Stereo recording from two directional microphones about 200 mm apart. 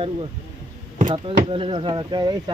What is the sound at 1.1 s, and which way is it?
Speech, 25° right (ahead or behind).